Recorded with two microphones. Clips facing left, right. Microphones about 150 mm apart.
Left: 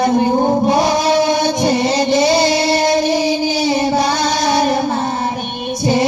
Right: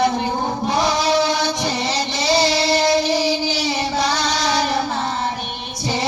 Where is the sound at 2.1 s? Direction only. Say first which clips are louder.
Left 3 dB; 50° left (ahead or behind).